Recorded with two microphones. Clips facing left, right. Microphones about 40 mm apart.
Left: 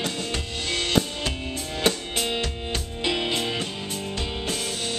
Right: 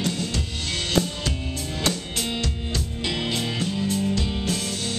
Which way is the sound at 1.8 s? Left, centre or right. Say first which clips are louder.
Left 3 dB; centre.